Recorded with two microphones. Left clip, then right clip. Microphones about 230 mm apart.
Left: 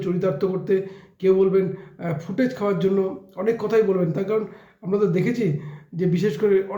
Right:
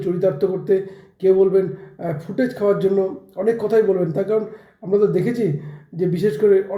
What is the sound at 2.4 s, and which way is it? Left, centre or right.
Speech, left.